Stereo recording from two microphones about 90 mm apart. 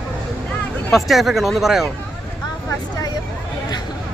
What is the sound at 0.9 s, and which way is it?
Speech, centre (ahead or behind).